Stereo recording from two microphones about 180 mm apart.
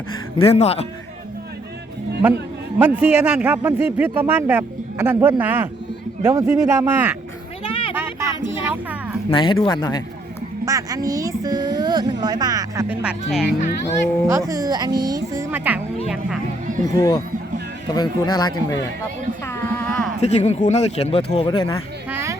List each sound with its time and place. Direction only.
0.3 s speech: 35° left (ahead or behind)
2.7 s speech: 5° right (ahead or behind)
7.6 s a sound: 30° left (ahead or behind)
7.9 s a sound: 15° right (ahead or behind)
8.4 s speech: 10° right (ahead or behind)
9.3 s speech: 25° left (ahead or behind)
10.7 s speech: 20° right (ahead or behind)
13.0 s speech: centre (ahead or behind)
14.3 s speech: 20° right (ahead or behind)
16.6 s music: 45° right (ahead or behind)
16.9 s speech: 20° left (ahead or behind)
19.5 s a sound: 10° left (ahead or behind)
20.2 s speech: 35° left (ahead or behind)
22.1 s a sound: 15° right (ahead or behind)